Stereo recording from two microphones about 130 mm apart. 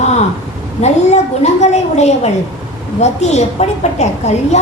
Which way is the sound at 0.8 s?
60° left (ahead or behind).